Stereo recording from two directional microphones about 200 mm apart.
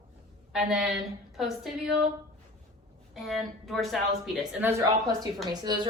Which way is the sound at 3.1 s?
Centre (ahead or behind).